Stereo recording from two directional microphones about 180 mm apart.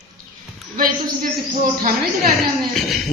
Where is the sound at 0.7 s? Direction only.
50° right (ahead or behind).